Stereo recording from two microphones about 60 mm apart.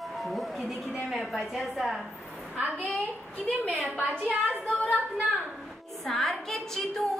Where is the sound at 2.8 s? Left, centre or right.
Centre.